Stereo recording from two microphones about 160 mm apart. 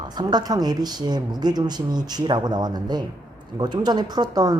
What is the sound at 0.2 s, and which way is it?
A woman's voice, 25° right (ahead or behind).